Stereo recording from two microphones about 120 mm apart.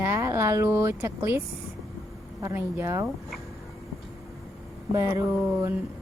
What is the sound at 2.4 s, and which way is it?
Speech, 20° right (ahead or behind).